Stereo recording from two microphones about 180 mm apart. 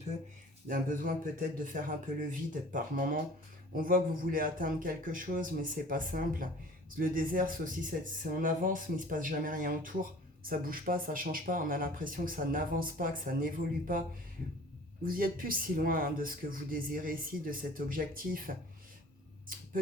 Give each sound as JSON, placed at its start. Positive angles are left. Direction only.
{"t": 0.7, "sound": "speech", "side_deg": -50}
{"t": 15.0, "sound": "speech", "side_deg": -55}